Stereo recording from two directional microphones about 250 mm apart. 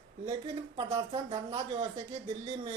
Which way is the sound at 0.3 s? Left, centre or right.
Centre.